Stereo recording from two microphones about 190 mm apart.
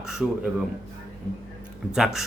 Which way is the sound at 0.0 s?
5° right (ahead or behind).